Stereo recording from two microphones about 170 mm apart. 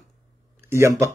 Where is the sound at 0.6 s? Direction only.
15° right (ahead or behind).